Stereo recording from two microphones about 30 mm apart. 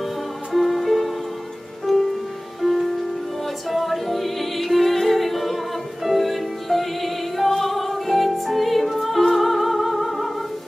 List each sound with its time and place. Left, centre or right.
0.5 s music: centre
3.7 s music: centre